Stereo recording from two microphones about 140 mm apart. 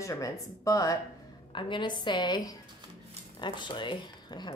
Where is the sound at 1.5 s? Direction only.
35° left (ahead or behind).